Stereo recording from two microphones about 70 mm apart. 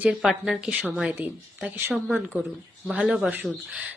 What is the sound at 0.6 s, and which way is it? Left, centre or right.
Speech, centre.